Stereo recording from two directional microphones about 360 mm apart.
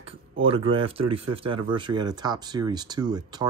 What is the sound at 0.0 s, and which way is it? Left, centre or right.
Speech, centre.